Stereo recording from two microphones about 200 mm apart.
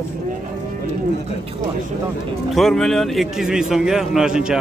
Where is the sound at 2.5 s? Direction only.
Centre (ahead or behind).